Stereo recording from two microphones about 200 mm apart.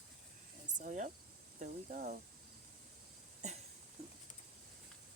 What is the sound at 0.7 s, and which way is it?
Speech, 40° right (ahead or behind).